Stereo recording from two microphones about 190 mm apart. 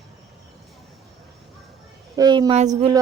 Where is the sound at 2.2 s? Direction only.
20° right (ahead or behind).